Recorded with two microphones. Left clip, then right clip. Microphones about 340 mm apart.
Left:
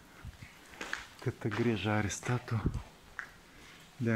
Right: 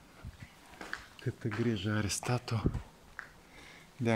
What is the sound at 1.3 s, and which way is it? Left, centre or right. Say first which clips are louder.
Speech: left 2 dB; centre.